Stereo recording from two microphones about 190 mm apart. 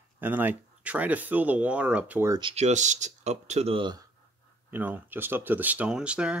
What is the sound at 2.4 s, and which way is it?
Speech, 30° right (ahead or behind).